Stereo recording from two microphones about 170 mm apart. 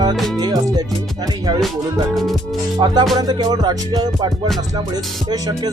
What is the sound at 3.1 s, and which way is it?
Music, 25° right (ahead or behind).